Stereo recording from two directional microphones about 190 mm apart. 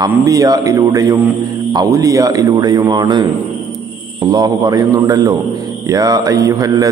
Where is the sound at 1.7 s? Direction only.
20° right (ahead or behind).